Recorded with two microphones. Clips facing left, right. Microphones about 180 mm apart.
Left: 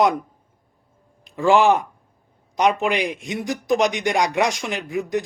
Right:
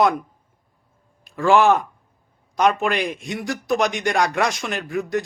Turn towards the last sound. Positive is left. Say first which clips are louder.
# even
turn(degrees=20)  # may be behind; listen again after turning